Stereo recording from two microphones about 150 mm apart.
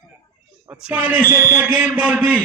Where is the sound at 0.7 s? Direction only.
10° right (ahead or behind).